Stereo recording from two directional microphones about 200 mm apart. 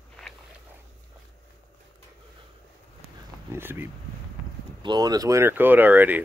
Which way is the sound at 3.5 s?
10° right (ahead or behind).